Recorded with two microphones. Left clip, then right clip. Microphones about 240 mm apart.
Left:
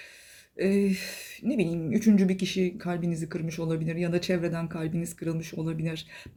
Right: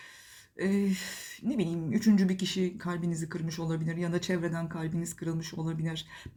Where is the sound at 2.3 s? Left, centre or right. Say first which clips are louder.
Left 3 dB; right.